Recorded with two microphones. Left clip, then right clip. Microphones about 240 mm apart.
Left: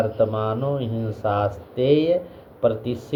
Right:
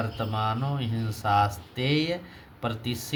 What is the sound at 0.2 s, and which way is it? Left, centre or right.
Speech, right.